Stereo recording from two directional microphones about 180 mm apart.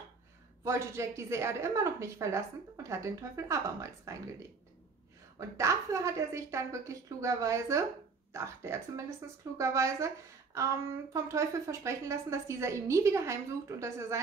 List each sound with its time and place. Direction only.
0.7 s a woman's voice: 15° right (ahead or behind)